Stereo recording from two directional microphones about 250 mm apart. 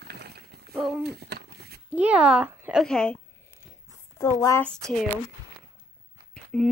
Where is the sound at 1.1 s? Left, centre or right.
Right.